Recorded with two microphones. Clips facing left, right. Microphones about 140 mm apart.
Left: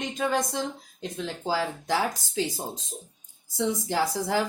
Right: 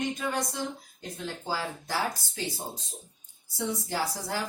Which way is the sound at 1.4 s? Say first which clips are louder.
Left 7 dB; 90° left.